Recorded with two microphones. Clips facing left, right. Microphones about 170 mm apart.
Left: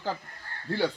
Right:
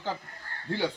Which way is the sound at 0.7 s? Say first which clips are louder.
Left 2 dB; 15° right (ahead or behind).